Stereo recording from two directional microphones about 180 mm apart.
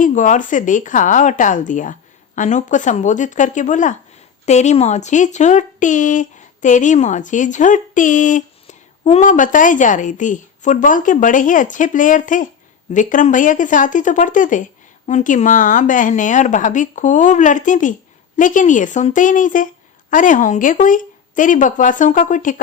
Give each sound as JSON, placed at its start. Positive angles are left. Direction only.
{"t": 0.0, "sound": "speech", "side_deg": 45}